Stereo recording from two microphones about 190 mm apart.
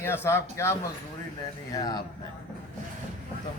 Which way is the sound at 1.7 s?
20° left (ahead or behind).